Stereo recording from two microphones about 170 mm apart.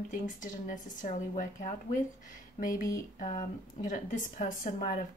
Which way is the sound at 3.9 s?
45° left (ahead or behind).